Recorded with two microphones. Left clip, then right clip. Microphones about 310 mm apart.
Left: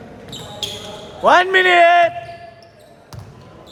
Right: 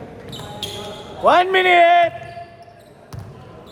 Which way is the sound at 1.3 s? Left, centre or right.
Left.